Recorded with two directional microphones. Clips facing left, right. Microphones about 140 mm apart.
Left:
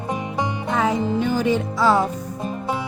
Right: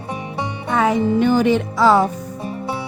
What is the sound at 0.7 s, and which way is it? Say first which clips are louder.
Music: right 5 dB; 70° right (ahead or behind).